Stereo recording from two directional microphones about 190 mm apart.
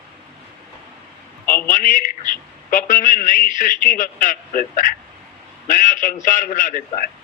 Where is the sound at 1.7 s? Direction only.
45° left (ahead or behind).